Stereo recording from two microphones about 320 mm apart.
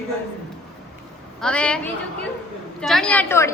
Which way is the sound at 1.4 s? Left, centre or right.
Centre.